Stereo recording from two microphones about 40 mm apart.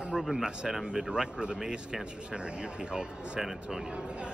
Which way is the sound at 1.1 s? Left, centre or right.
Right.